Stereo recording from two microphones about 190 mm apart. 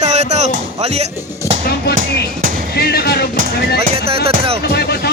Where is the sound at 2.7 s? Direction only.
55° left (ahead or behind).